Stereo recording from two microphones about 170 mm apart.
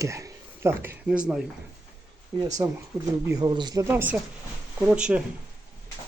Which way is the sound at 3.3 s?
25° right (ahead or behind).